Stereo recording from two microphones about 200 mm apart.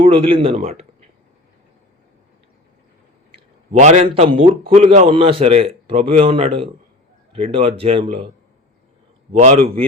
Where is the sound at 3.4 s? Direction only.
35° right (ahead or behind).